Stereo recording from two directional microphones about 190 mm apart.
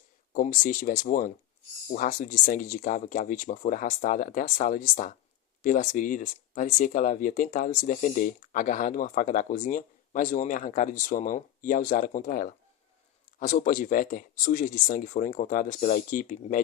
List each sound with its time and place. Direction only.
0.3 s speech: 45° left (ahead or behind)